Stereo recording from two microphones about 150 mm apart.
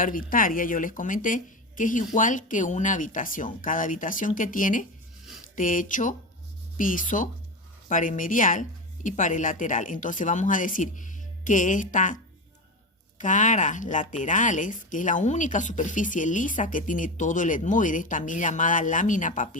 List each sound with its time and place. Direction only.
0.0 s speech: 70° left (ahead or behind)
13.1 s speech: 55° left (ahead or behind)